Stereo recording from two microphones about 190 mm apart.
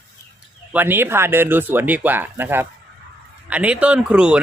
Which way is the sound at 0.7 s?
10° right (ahead or behind).